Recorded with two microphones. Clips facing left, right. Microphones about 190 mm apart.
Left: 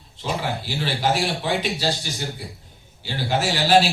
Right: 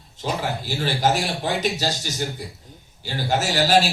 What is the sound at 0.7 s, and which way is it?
Speech, 45° right (ahead or behind).